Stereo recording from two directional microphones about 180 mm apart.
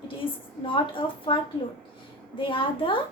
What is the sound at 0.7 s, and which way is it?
Speech, 30° left (ahead or behind).